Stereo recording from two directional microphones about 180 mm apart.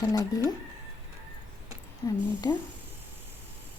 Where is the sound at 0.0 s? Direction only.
20° left (ahead or behind).